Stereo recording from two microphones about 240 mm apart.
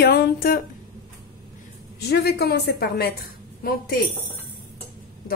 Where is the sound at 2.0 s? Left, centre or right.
Left.